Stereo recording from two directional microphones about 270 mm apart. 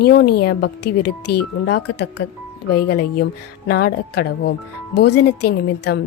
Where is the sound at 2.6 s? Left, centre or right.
Left.